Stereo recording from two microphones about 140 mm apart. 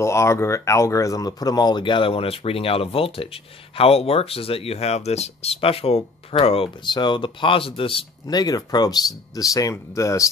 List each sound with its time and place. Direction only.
0.0 s speech: 20° left (ahead or behind)